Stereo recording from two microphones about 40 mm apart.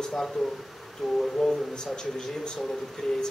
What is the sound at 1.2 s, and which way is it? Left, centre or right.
A man's voice, centre.